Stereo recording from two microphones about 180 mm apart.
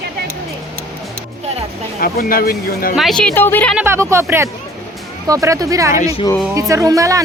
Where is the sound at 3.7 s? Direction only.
15° right (ahead or behind).